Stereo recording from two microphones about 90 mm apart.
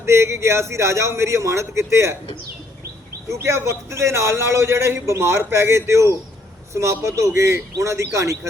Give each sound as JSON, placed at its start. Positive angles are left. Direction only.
{"t": 0.0, "sound": "a man's voice", "side_deg": -30}
{"t": 3.2, "sound": "a man's voice", "side_deg": -30}